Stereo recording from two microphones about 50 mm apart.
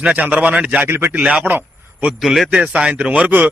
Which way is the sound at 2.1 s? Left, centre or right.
Centre.